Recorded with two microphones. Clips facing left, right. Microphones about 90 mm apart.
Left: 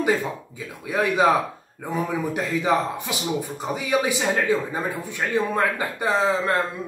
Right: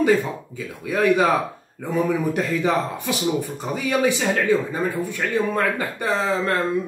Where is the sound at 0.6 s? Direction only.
20° left (ahead or behind).